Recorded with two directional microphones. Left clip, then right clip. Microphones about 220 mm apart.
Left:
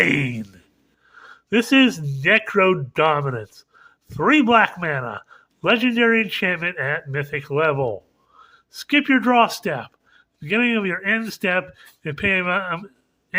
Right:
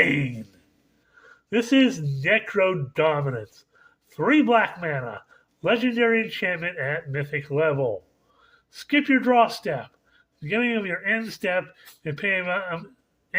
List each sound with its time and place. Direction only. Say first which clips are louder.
0.0 s speech: left 3 dB; 20° left (ahead or behind)